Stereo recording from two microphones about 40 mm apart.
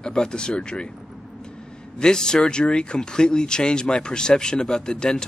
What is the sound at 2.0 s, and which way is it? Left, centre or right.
Speech, centre.